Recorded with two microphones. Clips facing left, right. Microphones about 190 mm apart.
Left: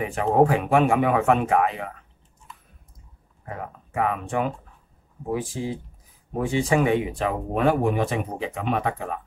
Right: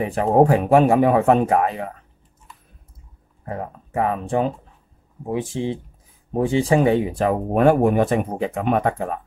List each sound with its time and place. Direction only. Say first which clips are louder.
0.0 s speech: right 3 dB; 35° right (ahead or behind)
3.4 s speech: right 5 dB; 35° right (ahead or behind)